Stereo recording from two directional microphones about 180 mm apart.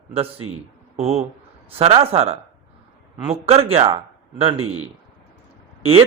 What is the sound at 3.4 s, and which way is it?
A man's voice, 35° right (ahead or behind).